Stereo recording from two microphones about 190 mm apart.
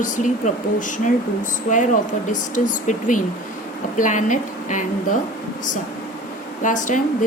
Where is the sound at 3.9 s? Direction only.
40° left (ahead or behind).